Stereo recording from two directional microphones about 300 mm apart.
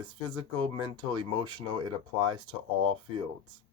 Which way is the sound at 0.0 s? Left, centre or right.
Centre.